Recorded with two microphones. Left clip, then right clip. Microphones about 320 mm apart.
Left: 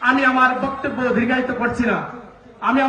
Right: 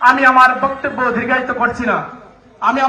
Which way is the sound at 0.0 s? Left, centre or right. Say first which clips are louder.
Right 7 dB; centre.